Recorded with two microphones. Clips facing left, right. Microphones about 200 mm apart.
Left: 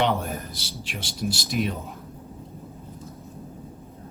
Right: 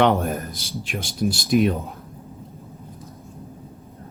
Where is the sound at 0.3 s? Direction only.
50° right (ahead or behind).